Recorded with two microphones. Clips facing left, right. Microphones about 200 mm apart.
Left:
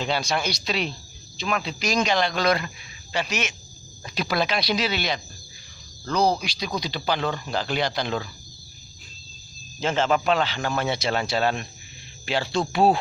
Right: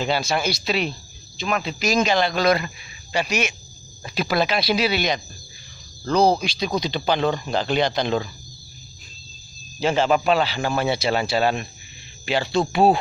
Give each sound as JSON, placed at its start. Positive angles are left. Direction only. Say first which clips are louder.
{"t": 0.0, "sound": "speech", "louder": "right 3 dB", "side_deg": -5}
{"t": 6.0, "sound": "speech", "louder": "right 4 dB", "side_deg": -30}
{"t": 9.8, "sound": "a man's voice", "louder": "right 3 dB", "side_deg": -10}